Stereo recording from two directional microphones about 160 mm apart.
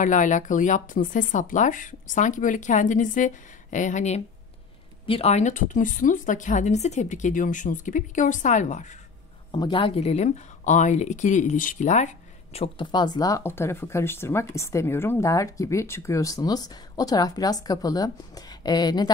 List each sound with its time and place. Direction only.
0.0 s speech: 50° left (ahead or behind)
9.5 s speech: 30° left (ahead or behind)